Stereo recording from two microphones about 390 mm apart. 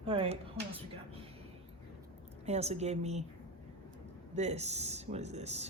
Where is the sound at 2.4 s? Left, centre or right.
Centre.